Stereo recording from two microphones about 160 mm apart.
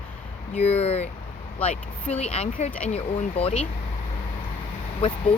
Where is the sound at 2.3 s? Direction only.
40° left (ahead or behind).